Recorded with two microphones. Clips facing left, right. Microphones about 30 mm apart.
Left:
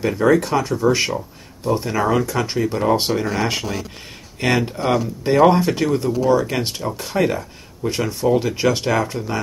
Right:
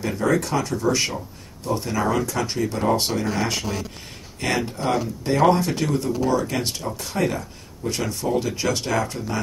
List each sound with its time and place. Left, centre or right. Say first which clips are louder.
0.2 s speech: left 5 dB; left